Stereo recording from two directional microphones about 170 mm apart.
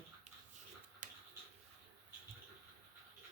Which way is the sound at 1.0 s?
50° right (ahead or behind).